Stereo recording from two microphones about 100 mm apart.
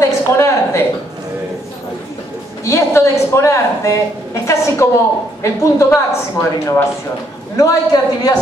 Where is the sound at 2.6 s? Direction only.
30° left (ahead or behind).